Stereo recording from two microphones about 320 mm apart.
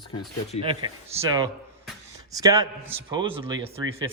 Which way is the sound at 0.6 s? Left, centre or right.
Centre.